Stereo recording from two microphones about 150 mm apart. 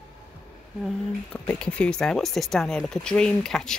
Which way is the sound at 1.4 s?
5° left (ahead or behind).